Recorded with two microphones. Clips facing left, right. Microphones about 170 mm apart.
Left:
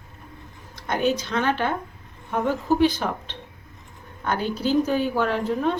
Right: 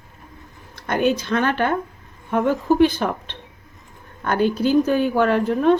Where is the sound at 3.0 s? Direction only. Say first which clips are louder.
Right 4 dB; 60° right (ahead or behind).